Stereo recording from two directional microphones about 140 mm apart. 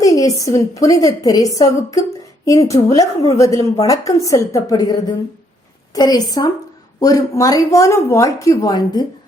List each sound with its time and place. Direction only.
0.0 s speech: 25° left (ahead or behind)